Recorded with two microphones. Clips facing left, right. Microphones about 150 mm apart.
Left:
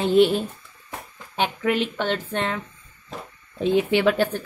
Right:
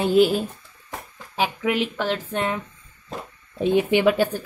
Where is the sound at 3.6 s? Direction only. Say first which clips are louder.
Right 1 dB; 15° right (ahead or behind).